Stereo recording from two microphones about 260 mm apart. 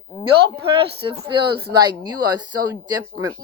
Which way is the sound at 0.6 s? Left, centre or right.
Right.